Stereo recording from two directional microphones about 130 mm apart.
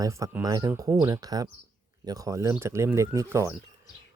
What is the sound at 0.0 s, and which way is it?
Speech, 25° right (ahead or behind).